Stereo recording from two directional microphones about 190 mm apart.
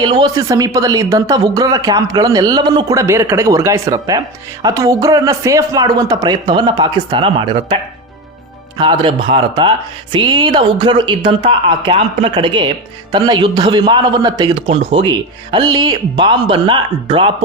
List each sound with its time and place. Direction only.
0.0 s a woman's voice: 20° right (ahead or behind)
8.8 s speech: 25° right (ahead or behind)